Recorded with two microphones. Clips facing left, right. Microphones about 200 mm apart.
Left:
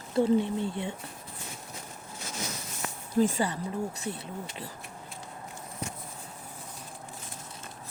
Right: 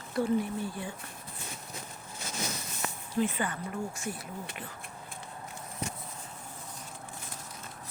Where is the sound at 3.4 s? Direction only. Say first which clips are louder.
Left 4 dB; 30° left (ahead or behind).